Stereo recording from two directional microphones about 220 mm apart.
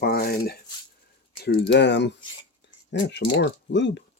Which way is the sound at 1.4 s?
50° left (ahead or behind).